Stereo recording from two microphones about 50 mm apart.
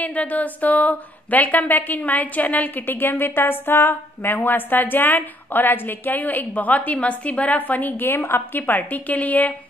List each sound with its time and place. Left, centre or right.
0.0 s a woman's voice: left